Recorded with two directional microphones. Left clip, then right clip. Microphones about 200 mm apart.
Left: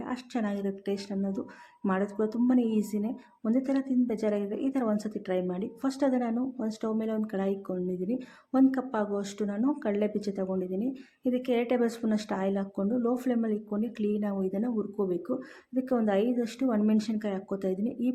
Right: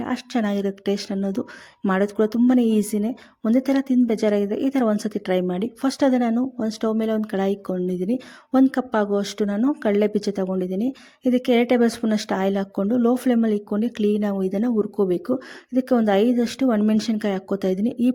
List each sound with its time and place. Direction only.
0.0 s speech: 40° right (ahead or behind)